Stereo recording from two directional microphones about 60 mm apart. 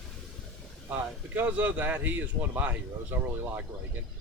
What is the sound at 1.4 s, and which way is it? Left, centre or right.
Speech, right.